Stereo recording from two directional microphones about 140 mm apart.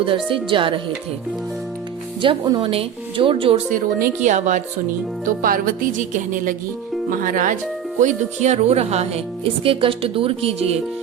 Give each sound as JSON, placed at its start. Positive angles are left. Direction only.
{"t": 0.3, "sound": "speech", "side_deg": -35}
{"t": 2.2, "sound": "speech", "side_deg": -40}
{"t": 3.7, "sound": "speech", "side_deg": -70}
{"t": 5.4, "sound": "music", "side_deg": -85}
{"t": 7.9, "sound": "speech", "side_deg": -60}